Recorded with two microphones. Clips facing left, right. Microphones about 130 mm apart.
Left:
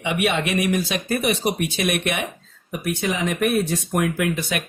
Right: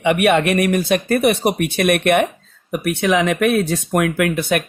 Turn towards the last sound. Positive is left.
turn(degrees=-60)  # may be behind; listen again after turning